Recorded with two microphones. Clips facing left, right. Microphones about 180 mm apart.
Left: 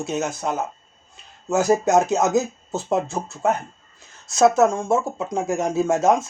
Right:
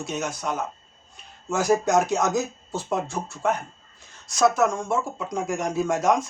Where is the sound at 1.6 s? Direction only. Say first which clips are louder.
Left 3 dB; 25° left (ahead or behind).